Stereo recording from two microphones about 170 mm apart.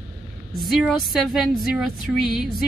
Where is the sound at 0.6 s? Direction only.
Centre (ahead or behind).